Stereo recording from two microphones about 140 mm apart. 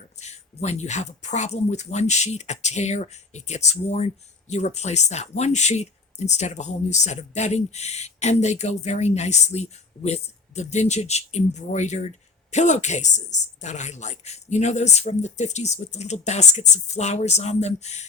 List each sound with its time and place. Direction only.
0.2 s a woman's voice: 50° left (ahead or behind)